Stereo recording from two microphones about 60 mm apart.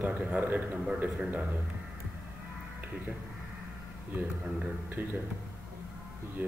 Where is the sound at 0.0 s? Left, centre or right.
Right.